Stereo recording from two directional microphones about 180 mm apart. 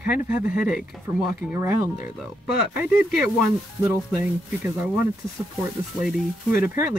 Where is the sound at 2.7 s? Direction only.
5° right (ahead or behind).